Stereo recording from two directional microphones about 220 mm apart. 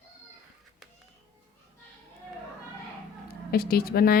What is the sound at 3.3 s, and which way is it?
Speech, 45° left (ahead or behind).